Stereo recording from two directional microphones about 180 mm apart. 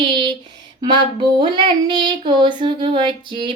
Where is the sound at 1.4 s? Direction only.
25° right (ahead or behind).